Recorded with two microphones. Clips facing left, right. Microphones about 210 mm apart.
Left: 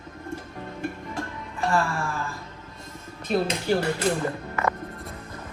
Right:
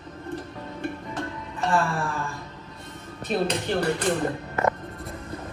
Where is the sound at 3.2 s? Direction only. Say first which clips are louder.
Left 1 dB; centre (ahead or behind).